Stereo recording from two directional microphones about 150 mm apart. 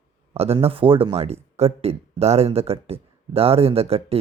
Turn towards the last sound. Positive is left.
turn(degrees=-40)  # may be behind; listen again after turning